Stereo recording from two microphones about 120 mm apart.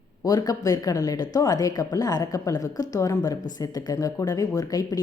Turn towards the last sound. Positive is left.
turn(degrees=30)  # may be behind; listen again after turning